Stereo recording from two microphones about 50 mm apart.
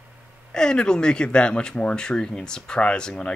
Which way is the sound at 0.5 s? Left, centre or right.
Centre.